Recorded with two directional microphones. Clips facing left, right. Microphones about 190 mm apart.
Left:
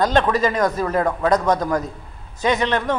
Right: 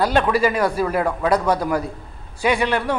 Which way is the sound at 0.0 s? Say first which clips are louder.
Even; 10° right (ahead or behind).